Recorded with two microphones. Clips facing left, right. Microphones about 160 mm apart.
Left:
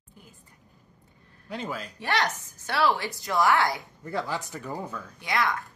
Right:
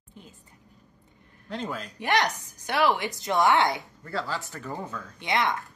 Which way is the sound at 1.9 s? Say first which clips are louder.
Right 3 dB; 15° right (ahead or behind).